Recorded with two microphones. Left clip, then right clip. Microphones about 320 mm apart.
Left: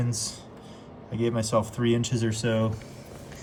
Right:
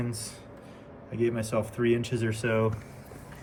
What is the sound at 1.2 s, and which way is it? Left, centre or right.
Speech, centre.